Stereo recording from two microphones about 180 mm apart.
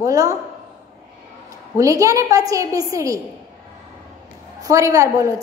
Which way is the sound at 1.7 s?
20° right (ahead or behind).